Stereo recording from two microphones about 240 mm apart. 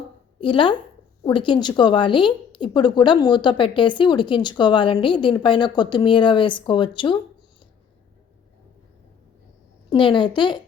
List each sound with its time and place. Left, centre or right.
0.3 s a woman's voice: left
9.9 s speech: centre